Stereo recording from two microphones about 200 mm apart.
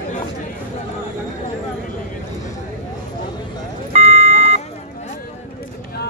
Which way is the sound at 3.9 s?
35° right (ahead or behind).